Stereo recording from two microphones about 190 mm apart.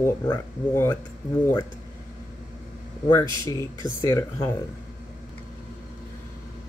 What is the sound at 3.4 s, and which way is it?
A man's voice, 15° left (ahead or behind).